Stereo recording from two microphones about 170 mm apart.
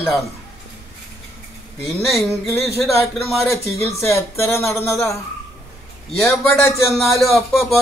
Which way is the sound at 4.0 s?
15° left (ahead or behind).